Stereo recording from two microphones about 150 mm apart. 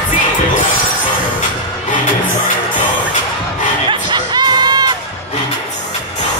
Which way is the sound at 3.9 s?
30° right (ahead or behind).